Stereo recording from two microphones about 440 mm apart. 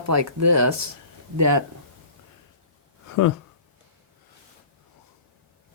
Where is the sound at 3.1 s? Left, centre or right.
Left.